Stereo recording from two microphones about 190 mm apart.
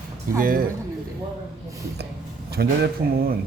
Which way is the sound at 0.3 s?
50° right (ahead or behind).